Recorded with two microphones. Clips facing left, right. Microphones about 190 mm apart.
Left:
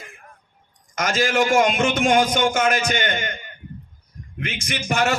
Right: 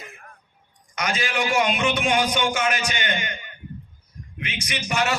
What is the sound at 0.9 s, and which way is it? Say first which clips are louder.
A man's voice: left 6 dB; 45° left (ahead or behind).